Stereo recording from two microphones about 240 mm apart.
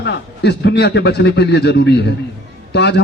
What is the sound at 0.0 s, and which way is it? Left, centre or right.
A man's voice, left.